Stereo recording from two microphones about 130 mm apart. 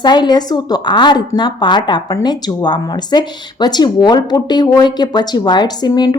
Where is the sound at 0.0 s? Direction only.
35° left (ahead or behind).